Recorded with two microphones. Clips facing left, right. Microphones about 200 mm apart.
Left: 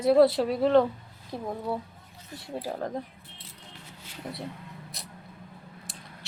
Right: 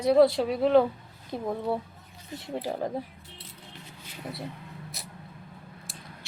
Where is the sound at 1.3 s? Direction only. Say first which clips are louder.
Right 3 dB; 20° right (ahead or behind).